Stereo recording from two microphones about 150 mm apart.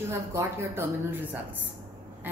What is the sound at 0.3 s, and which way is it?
Speech, 15° right (ahead or behind).